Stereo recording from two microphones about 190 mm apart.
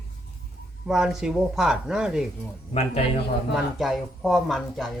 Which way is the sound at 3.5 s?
Centre (ahead or behind).